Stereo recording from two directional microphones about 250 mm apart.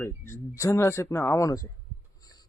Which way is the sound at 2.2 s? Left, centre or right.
Centre.